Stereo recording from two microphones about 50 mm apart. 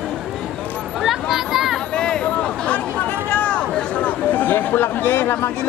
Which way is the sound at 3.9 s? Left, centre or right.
Left.